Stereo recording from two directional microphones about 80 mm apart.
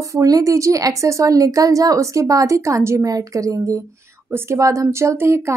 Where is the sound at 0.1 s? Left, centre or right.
Right.